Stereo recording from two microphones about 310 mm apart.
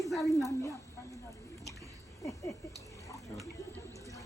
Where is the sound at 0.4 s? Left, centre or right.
Centre.